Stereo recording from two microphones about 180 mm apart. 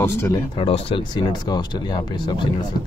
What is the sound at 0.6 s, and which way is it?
Speech, 30° left (ahead or behind).